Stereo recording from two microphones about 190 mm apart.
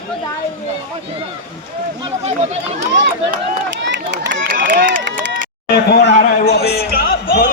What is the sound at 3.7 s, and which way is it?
Run, 65° right (ahead or behind).